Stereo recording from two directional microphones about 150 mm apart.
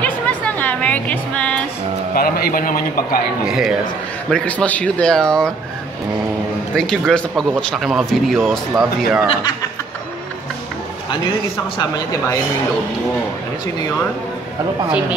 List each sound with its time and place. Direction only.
0.0 s music: 10° left (ahead or behind)
2.1 s a man's voice: 90° left; by 3.2 s 70° left (ahead or behind)
3.4 s speech: 5° right (ahead or behind)
4.3 s speech: 10° left (ahead or behind)
6.7 s speech: 5° left (ahead or behind)
11.5 s speech: 20° left (ahead or behind)